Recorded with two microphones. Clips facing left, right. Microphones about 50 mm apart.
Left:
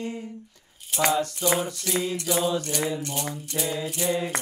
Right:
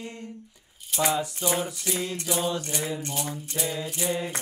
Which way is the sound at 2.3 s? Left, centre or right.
Centre.